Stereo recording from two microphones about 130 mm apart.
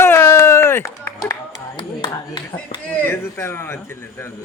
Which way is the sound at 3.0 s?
20° left (ahead or behind).